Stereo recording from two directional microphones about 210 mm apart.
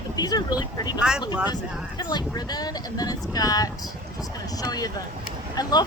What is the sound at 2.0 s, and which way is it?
Speech, 20° left (ahead or behind).